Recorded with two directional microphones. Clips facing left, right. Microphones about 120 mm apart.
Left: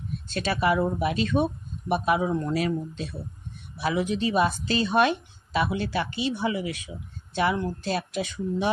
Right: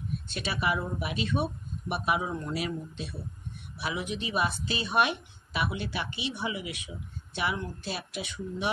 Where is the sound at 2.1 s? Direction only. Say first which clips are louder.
Left 6 dB; 40° left (ahead or behind).